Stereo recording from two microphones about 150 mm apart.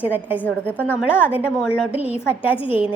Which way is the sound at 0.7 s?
10° left (ahead or behind).